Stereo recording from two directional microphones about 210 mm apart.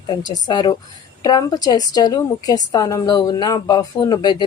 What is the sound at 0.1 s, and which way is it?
A woman's voice, 20° left (ahead or behind).